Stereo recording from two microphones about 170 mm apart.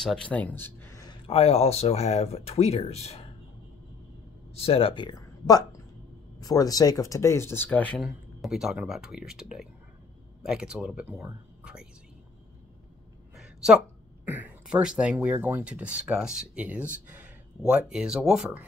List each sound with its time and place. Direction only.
0.0 s speech: 5° left (ahead or behind)
1.2 s speech: 35° left (ahead or behind)
4.6 s speech: 35° left (ahead or behind); by 11.9 s 5° right (ahead or behind)
13.4 s a sound: 5° right (ahead or behind)
14.2 s speech: 10° right (ahead or behind)